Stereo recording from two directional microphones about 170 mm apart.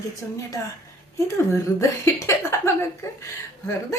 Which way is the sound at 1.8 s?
15° left (ahead or behind).